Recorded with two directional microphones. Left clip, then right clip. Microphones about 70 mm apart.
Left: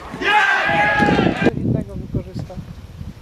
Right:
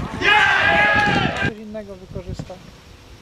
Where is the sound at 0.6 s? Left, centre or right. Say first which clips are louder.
Right 1 dB; right.